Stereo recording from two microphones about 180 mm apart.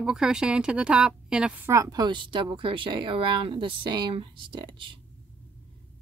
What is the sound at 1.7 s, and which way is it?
Speech, 20° right (ahead or behind).